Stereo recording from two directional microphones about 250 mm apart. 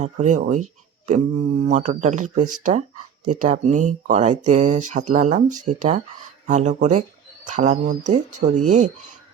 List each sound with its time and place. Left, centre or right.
0.0 s speech: right